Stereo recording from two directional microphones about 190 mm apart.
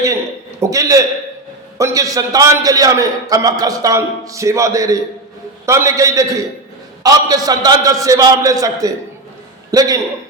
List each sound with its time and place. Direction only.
0.6 s a man's voice: 15° right (ahead or behind)